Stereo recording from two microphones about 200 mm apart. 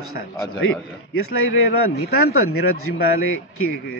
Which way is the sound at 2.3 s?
90° left.